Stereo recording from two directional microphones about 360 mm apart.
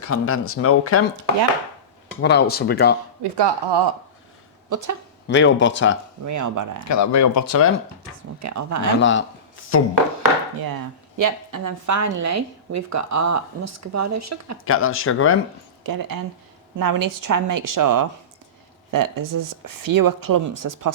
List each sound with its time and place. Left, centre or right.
0.0 s speech: left
2.2 s speech: left
3.3 s speech: right
4.7 s a woman's voice: right
5.3 s speech: left
6.2 s speech: right
6.8 s speech: left
8.4 s a woman's voice: right
9.0 s speech: left
10.6 s a woman's voice: right
14.6 s speech: left
15.8 s speech: right